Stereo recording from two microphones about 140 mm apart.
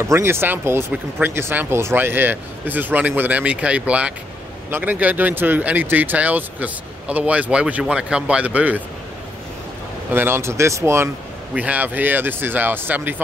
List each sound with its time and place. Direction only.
0.0 s speech: 20° right (ahead or behind)
10.1 s speech: 15° right (ahead or behind)